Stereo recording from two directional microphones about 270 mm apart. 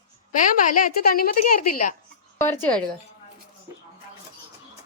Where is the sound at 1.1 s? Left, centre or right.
Left.